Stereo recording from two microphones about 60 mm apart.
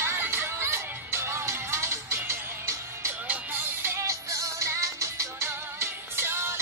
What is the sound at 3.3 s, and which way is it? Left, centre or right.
Music, right.